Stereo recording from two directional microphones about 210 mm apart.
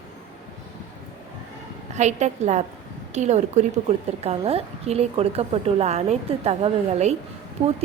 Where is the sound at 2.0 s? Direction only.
35° right (ahead or behind).